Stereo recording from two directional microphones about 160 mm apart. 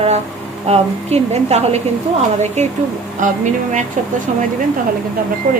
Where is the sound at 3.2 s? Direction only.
50° right (ahead or behind).